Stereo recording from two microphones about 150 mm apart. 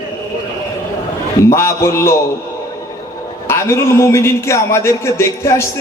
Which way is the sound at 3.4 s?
15° left (ahead or behind).